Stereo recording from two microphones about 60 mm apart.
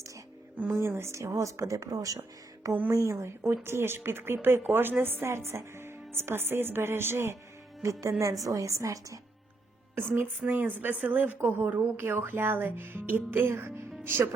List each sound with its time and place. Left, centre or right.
0.7 s a woman's voice: right
2.9 s a woman's voice: right
3.2 s speech: right
7.8 s a woman's voice: right
9.9 s a woman's voice: right
10.4 s speech: right